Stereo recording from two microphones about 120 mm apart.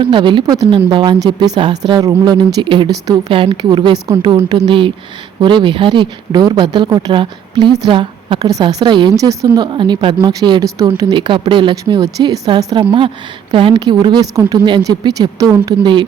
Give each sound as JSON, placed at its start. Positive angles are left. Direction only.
{"t": 0.0, "sound": "speech", "side_deg": -45}
{"t": 1.7, "sound": "a woman's voice", "side_deg": -35}
{"t": 11.7, "sound": "speech", "side_deg": -30}
{"t": 12.7, "sound": "a woman's voice", "side_deg": -40}